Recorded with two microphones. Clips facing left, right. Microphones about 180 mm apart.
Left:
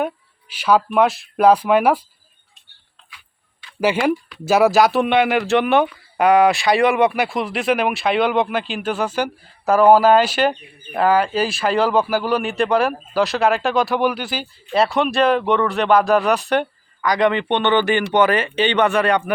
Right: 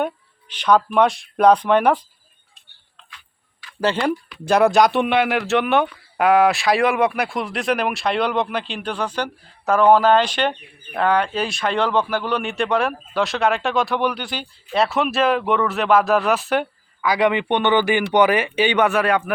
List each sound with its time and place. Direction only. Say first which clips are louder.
0.0 s speech: left 1 dB; 5° left (ahead or behind)
3.8 s speech: left 2 dB; 10° left (ahead or behind)